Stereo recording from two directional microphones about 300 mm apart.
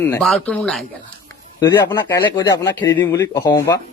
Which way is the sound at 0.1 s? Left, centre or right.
Centre.